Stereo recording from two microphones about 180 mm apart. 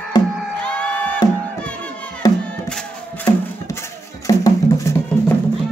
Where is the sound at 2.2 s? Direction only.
20° left (ahead or behind).